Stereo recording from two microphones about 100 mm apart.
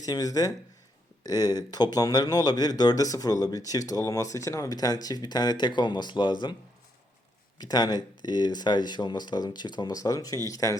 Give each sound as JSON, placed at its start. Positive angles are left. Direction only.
{"t": 0.0, "sound": "speech", "side_deg": 35}
{"t": 7.6, "sound": "speech", "side_deg": 40}